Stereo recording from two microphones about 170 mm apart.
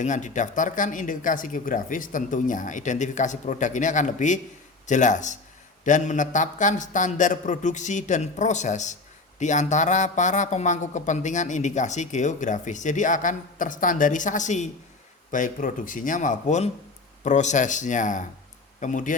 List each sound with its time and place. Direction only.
0.0 s speech: 45° left (ahead or behind)